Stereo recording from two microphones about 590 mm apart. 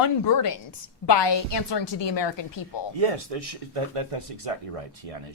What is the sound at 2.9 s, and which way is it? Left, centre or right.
Speech, right.